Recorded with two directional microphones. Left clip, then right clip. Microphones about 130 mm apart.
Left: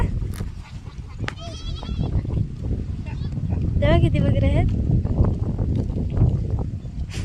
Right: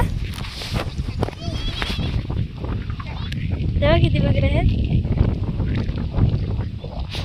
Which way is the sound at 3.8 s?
5° right (ahead or behind).